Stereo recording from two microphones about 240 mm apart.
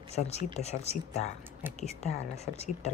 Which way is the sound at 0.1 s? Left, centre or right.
Left.